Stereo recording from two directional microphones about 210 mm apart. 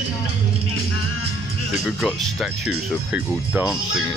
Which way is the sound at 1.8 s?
Centre (ahead or behind).